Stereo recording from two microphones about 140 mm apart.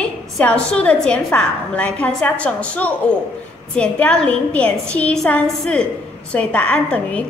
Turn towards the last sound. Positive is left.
turn(degrees=10)  # may be behind; listen again after turning